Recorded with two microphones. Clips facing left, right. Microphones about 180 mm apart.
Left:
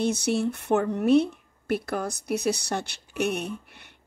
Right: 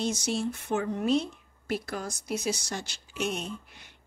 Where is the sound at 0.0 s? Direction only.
60° left (ahead or behind).